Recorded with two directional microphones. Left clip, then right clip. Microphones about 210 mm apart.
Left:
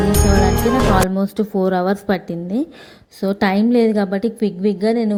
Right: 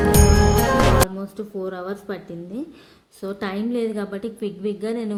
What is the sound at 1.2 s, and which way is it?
A woman's voice, 35° left (ahead or behind).